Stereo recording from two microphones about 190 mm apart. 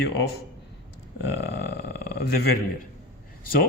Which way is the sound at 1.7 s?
55° left (ahead or behind).